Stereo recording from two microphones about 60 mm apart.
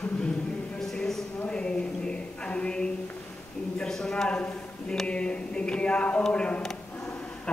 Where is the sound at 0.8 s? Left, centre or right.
Centre.